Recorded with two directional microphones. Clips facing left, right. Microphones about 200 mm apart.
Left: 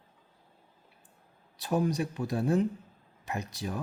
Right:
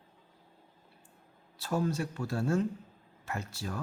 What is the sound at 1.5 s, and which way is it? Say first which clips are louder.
Speech: left 3 dB; 15° left (ahead or behind).